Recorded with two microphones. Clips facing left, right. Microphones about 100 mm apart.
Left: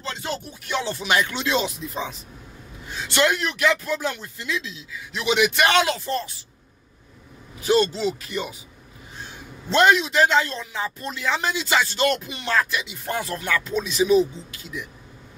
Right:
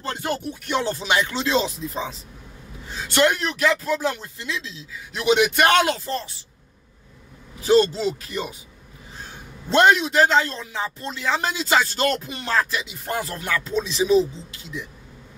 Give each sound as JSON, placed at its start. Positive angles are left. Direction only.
{"t": 0.0, "sound": "music", "side_deg": -55}
{"t": 0.9, "sound": "a man's voice", "side_deg": -25}
{"t": 5.1, "sound": "music", "side_deg": -40}
{"t": 6.0, "sound": "a woman's voice", "side_deg": -30}
{"t": 7.6, "sound": "a man's voice", "side_deg": -35}
{"t": 9.7, "sound": "a man's voice", "side_deg": -40}